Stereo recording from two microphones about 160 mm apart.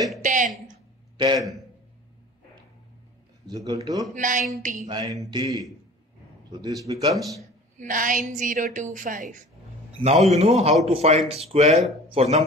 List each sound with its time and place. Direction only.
0.2 s a sound: 55° right (ahead or behind)
0.7 s a sound: 25° right (ahead or behind)
3.4 s speech: 25° right (ahead or behind)
4.1 s a woman's voice: 50° right (ahead or behind)
4.8 s speech: 25° right (ahead or behind)
7.8 s a woman's voice: 55° right (ahead or behind)
9.9 s a man's voice: 40° right (ahead or behind)